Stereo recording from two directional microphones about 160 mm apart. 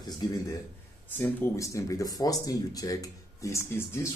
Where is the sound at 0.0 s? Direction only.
20° left (ahead or behind).